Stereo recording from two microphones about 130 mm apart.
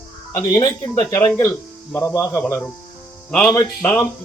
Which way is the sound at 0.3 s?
30° left (ahead or behind).